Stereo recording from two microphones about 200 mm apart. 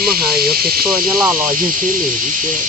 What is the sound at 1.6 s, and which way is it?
Speech, 40° right (ahead or behind).